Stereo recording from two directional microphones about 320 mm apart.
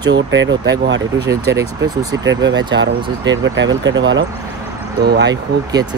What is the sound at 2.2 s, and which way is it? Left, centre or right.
Speech, right.